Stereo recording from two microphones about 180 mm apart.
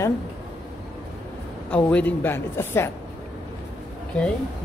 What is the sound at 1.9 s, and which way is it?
Speech, 10° left (ahead or behind).